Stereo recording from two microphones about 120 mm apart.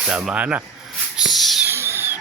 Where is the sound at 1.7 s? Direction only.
20° right (ahead or behind).